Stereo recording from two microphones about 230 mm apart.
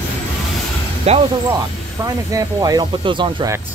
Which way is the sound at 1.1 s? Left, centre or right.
Right.